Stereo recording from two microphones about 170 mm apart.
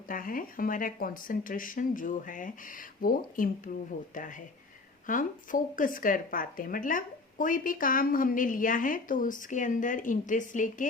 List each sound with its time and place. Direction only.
0.1 s speech: 55° left (ahead or behind)